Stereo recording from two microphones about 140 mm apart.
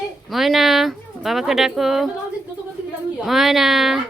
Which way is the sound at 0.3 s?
Centre (ahead or behind).